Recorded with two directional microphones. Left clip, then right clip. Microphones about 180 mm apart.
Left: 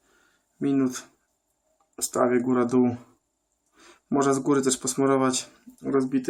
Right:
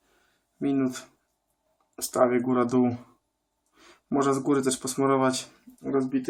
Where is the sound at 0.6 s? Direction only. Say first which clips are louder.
Left 2 dB; 20° left (ahead or behind).